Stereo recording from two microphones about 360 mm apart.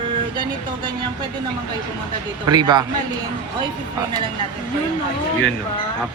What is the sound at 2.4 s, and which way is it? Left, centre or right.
Speech, centre.